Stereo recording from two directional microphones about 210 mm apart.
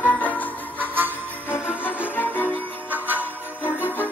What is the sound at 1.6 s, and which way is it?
Music, 5° right (ahead or behind).